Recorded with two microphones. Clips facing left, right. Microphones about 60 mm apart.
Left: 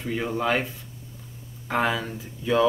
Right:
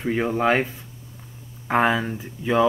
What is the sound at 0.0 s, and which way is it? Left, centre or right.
Speech, right.